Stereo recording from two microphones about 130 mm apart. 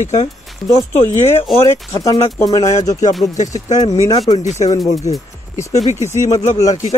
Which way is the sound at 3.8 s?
30° left (ahead or behind).